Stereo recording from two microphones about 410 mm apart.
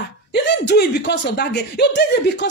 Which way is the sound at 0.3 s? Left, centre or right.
Left.